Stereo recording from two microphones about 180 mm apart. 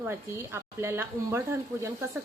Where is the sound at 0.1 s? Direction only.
15° right (ahead or behind).